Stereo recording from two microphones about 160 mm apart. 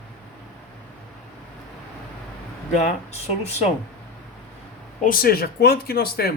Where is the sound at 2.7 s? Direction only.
45° left (ahead or behind).